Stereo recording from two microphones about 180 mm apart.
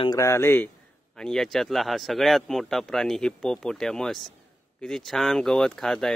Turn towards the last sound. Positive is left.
turn(degrees=5)  # may be behind; listen again after turning